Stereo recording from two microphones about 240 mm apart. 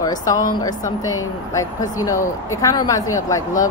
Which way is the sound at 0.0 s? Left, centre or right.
Centre.